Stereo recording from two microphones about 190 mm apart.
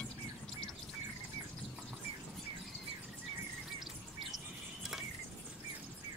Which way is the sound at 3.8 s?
Centre (ahead or behind).